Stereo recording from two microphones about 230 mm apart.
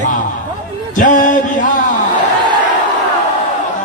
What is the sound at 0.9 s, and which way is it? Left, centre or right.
Speech, left.